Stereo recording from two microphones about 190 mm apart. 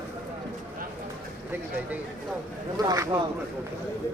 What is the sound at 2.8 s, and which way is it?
Speech, 20° right (ahead or behind).